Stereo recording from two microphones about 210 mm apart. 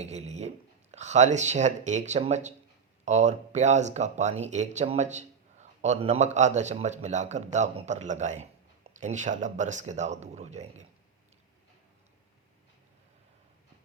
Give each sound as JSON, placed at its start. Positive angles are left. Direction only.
{"t": 0.0, "sound": "speech", "side_deg": -30}